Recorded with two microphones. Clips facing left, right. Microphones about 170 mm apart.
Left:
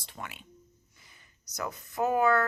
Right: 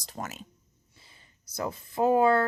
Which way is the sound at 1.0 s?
30° right (ahead or behind).